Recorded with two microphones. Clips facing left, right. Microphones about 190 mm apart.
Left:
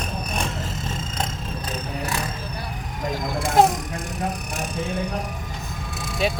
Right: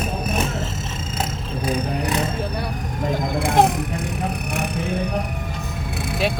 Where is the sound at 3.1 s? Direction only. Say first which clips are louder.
Even; 60° right (ahead or behind).